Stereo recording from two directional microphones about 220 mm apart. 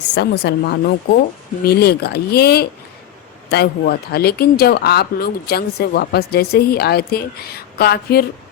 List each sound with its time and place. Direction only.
0.1 s speech: 50° left (ahead or behind)